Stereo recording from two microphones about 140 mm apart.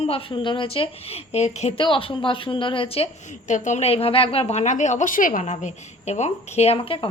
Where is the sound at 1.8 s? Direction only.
40° left (ahead or behind).